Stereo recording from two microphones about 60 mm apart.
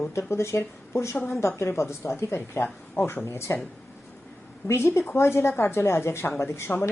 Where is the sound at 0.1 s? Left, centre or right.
Left.